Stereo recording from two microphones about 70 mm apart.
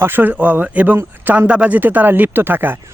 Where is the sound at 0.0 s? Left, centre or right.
Right.